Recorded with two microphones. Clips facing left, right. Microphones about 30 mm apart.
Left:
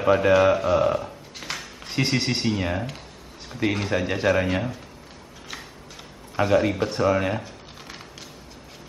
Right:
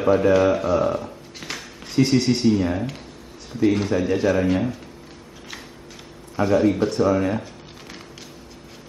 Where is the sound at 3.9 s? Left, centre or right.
Left.